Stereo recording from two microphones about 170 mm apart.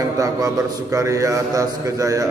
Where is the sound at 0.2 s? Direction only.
20° right (ahead or behind).